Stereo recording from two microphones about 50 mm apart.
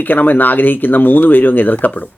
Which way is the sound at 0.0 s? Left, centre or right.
Left.